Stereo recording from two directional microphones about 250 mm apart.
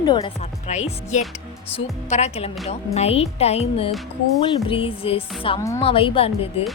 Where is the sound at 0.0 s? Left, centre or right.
Centre.